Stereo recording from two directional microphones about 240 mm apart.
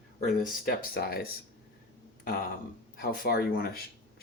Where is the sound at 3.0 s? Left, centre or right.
Left.